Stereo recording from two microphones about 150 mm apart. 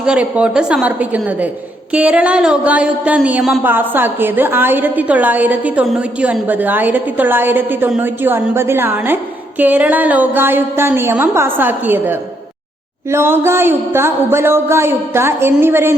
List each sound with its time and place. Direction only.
0.0 s a woman's voice: 5° right (ahead or behind)